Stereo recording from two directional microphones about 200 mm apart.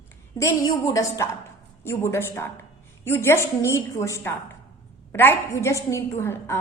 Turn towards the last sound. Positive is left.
turn(degrees=10)  # may be behind; listen again after turning